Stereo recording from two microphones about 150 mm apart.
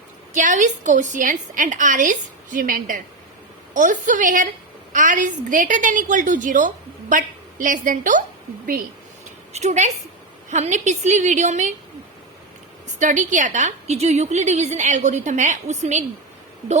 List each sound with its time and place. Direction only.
0.3 s a woman's voice: 60° right (ahead or behind)
3.8 s a woman's voice: 60° right (ahead or behind)
9.5 s a woman's voice: 45° right (ahead or behind)
13.0 s a woman's voice: 55° right (ahead or behind)